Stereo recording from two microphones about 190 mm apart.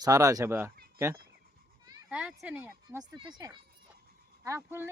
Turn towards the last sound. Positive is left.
turn(degrees=-15)  # may be behind; listen again after turning